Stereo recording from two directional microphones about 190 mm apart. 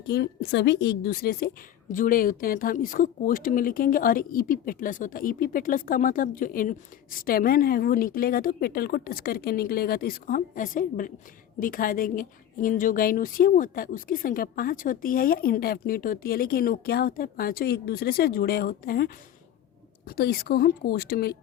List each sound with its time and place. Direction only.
0.1 s a woman's voice: 60° left (ahead or behind)